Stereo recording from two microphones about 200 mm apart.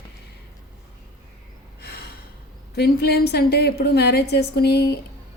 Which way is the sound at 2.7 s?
55° left (ahead or behind).